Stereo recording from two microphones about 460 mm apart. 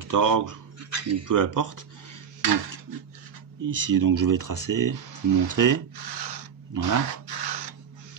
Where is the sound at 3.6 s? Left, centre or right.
Right.